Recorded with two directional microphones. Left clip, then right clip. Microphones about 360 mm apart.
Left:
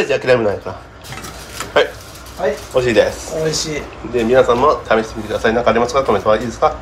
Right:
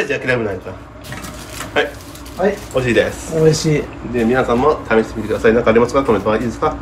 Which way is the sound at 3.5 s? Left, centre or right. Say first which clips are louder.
Right 5 dB; centre.